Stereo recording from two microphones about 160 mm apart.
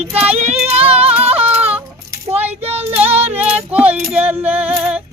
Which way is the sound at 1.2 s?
40° right (ahead or behind).